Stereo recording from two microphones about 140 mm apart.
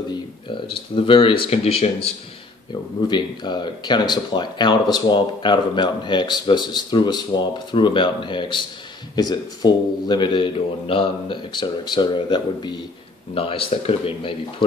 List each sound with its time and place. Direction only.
0.1 s speech: 35° left (ahead or behind)
3.1 s speech: 30° left (ahead or behind)